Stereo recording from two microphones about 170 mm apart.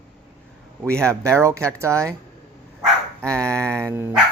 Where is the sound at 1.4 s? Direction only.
15° right (ahead or behind).